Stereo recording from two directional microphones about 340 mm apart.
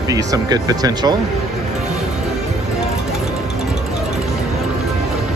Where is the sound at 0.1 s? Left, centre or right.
Centre.